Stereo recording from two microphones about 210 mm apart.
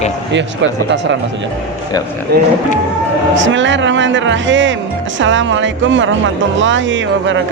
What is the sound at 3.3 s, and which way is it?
Speech, 60° right (ahead or behind).